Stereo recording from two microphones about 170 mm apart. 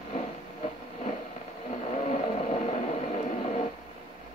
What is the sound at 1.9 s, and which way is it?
Vehicle, 40° left (ahead or behind).